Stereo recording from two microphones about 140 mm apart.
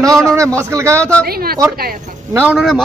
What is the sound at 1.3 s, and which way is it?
Speech, 90° right.